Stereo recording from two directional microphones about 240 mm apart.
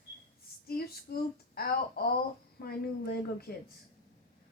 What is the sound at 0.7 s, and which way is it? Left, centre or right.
A woman's voice, left.